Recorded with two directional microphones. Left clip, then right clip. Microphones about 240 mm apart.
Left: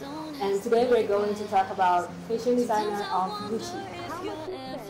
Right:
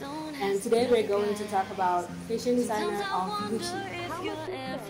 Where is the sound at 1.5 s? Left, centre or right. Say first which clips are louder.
Left 7 dB; centre.